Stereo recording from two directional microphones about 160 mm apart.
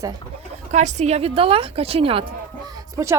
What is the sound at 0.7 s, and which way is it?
A woman's voice, 45° right (ahead or behind).